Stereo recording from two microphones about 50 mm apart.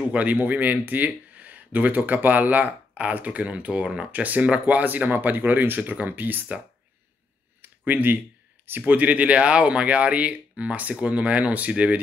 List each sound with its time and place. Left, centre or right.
0.1 s speech: right
4.1 s speech: right
7.6 s a sound: right
8.6 s speech: right